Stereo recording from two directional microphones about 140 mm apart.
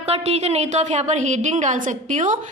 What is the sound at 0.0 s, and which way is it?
A woman's voice, 45° right (ahead or behind).